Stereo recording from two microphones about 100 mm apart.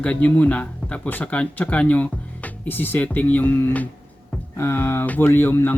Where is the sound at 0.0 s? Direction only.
15° left (ahead or behind).